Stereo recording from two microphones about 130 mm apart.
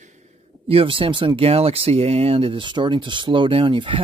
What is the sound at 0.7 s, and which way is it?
Speech, 45° right (ahead or behind).